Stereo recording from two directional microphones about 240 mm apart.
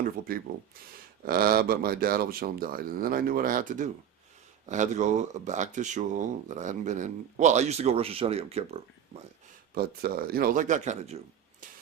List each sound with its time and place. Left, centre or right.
1.2 s speech: right
9.7 s speech: right